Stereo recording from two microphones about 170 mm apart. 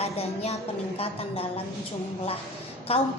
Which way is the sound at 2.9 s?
35° left (ahead or behind).